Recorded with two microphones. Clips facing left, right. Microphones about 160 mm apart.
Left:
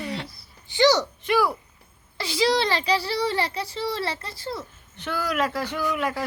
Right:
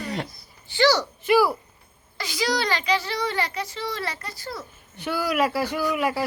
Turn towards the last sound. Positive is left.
turn(degrees=-5)  # may be behind; listen again after turning